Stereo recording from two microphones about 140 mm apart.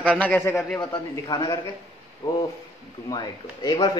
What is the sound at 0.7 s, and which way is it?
A man's voice, 25° left (ahead or behind).